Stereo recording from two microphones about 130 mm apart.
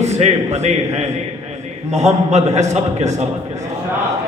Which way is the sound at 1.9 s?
60° right (ahead or behind).